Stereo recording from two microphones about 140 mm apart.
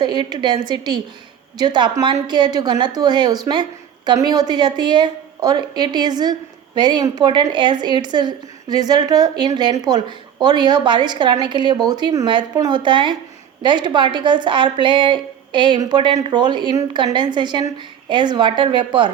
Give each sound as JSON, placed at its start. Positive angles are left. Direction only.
{"t": 0.0, "sound": "a woman's voice", "side_deg": -30}